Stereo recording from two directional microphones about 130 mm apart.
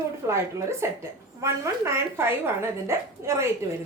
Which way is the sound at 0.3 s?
20° right (ahead or behind).